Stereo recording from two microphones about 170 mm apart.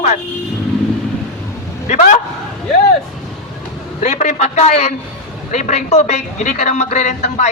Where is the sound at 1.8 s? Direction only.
45° left (ahead or behind).